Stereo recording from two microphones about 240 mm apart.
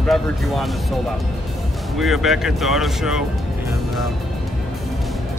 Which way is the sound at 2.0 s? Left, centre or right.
Centre.